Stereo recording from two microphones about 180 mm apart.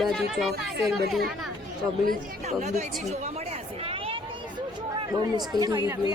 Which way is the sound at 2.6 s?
40° right (ahead or behind).